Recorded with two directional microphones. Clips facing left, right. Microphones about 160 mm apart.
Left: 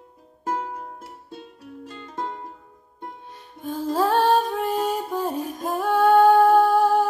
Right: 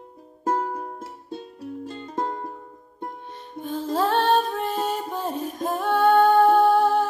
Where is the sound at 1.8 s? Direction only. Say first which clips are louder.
Right 3 dB; 30° right (ahead or behind).